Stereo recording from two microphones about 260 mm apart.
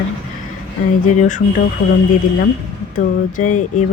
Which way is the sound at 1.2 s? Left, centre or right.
Left.